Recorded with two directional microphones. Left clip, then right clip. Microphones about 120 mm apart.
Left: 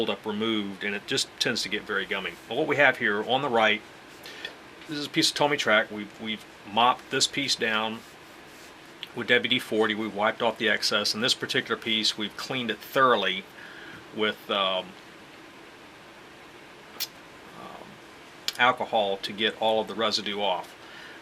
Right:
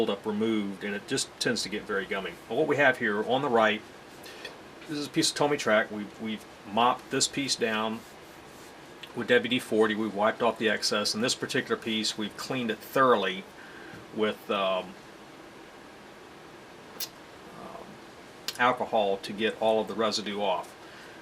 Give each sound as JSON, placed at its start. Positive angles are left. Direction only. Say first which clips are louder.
{"t": 0.4, "sound": "speech", "louder": "left 4 dB", "side_deg": 35}
{"t": 1.0, "sound": "speech", "louder": "left 2 dB", "side_deg": 10}
{"t": 3.0, "sound": "speech", "louder": "left 2 dB", "side_deg": 25}
{"t": 4.9, "sound": "speech", "louder": "left 3 dB", "side_deg": 10}
{"t": 9.2, "sound": "speech", "louder": "left 2 dB", "side_deg": 10}
{"t": 18.4, "sound": "speech", "louder": "left 3 dB", "side_deg": 10}